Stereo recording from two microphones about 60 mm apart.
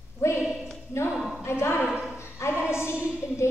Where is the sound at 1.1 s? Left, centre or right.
Centre.